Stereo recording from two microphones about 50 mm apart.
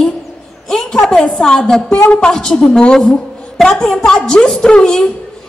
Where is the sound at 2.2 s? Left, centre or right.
Centre.